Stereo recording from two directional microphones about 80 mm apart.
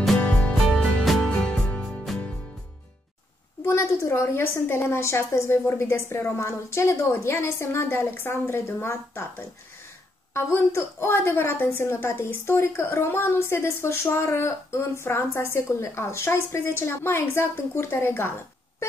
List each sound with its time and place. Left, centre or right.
0.2 s music: centre
0.7 s music: centre
3.6 s a woman's voice: left
10.3 s a woman's voice: left